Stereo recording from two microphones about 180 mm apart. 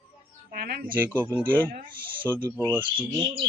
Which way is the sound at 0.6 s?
60° right (ahead or behind).